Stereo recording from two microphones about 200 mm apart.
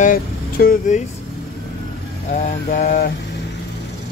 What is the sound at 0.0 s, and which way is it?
Speech, 45° left (ahead or behind).